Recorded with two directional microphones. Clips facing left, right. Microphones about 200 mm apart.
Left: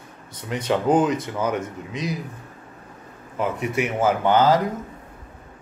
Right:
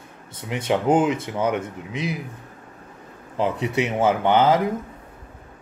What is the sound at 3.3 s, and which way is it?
Speech, 25° right (ahead or behind).